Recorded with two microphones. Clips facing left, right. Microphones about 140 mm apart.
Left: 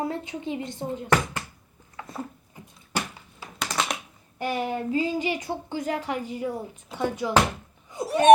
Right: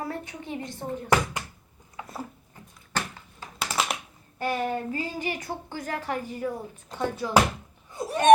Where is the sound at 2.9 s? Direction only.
10° left (ahead or behind).